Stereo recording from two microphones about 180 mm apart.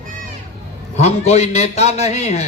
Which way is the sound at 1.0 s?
35° left (ahead or behind).